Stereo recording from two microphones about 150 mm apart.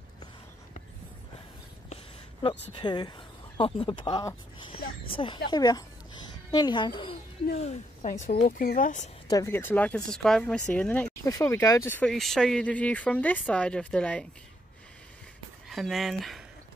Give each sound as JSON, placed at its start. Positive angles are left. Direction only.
{"t": 2.4, "sound": "speech", "side_deg": 35}
{"t": 7.6, "sound": "speech", "side_deg": 55}
{"t": 9.3, "sound": "speech", "side_deg": 20}
{"t": 11.2, "sound": "speech", "side_deg": 20}
{"t": 12.0, "sound": "speech", "side_deg": 0}
{"t": 15.7, "sound": "speech", "side_deg": 0}